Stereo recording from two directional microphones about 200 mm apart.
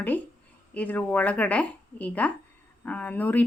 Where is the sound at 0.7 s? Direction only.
10° left (ahead or behind).